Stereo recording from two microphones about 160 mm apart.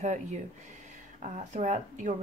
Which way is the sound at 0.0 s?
45° right (ahead or behind).